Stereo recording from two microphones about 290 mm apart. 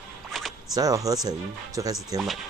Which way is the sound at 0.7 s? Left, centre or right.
Centre.